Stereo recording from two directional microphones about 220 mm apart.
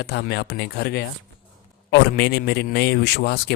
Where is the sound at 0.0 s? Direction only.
45° left (ahead or behind).